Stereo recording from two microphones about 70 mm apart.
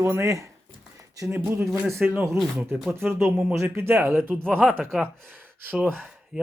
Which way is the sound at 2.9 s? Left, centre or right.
Right.